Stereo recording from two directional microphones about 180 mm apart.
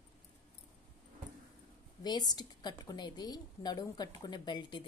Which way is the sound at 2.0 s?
20° left (ahead or behind).